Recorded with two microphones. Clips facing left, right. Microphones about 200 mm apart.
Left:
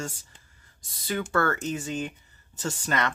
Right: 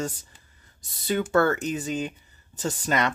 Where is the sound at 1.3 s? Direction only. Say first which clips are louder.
Right 4 dB; 15° right (ahead or behind).